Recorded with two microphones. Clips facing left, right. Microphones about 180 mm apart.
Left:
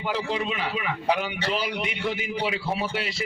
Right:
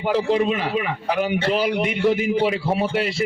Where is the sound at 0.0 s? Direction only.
45° right (ahead or behind).